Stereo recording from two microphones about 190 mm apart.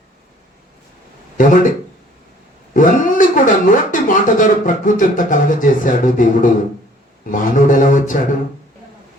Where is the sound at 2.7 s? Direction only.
45° left (ahead or behind).